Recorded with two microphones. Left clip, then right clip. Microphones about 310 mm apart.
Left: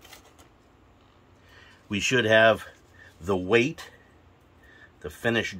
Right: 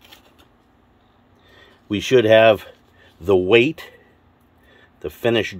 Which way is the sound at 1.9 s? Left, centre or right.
Right.